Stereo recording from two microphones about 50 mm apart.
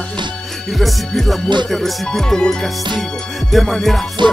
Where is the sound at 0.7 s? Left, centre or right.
Centre.